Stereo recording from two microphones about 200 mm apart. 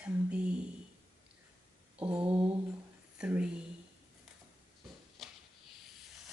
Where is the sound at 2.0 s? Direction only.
5° right (ahead or behind).